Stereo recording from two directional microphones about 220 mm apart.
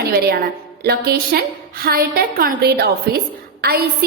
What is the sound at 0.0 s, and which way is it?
A woman's voice, 45° right (ahead or behind).